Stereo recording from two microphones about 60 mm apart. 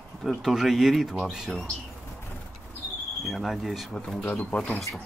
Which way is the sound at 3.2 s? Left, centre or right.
Centre.